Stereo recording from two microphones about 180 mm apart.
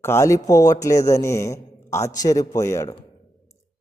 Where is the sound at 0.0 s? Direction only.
15° left (ahead or behind).